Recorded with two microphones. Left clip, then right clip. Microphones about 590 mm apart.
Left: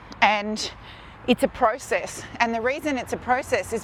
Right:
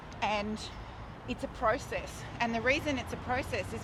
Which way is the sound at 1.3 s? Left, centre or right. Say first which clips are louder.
Left 11 dB; left.